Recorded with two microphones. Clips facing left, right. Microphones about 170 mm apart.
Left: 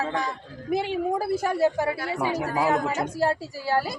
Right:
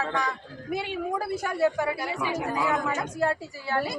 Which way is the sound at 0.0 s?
30° left (ahead or behind).